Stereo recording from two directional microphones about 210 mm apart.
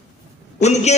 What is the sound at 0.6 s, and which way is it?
Speech, 30° left (ahead or behind).